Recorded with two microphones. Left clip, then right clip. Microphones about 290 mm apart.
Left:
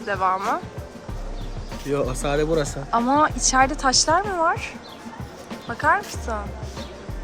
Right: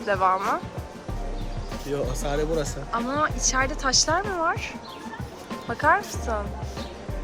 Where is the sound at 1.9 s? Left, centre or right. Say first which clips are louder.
Left 5 dB; left.